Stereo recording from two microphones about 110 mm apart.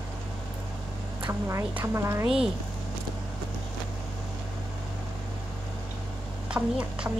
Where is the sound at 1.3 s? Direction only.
25° right (ahead or behind).